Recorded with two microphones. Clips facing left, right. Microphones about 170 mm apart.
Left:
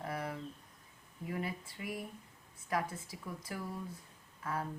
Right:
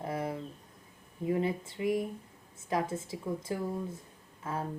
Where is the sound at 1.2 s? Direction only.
25° right (ahead or behind).